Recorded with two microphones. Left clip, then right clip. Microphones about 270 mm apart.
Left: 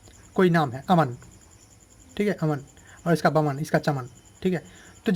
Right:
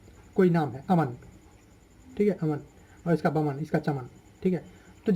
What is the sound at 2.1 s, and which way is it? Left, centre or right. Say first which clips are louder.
Speech: left 1 dB; left.